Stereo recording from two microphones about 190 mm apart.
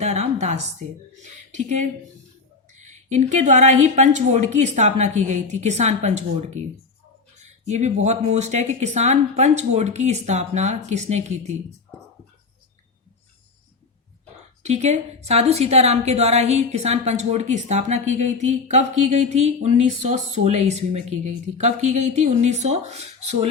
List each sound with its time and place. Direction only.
0.0 s a sound: 35° right (ahead or behind)
1.2 s a woman's voice: 40° right (ahead or behind)
14.6 s a woman's voice: 35° right (ahead or behind)